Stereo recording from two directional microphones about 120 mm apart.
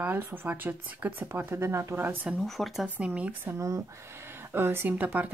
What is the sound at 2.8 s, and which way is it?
Speech, 10° right (ahead or behind).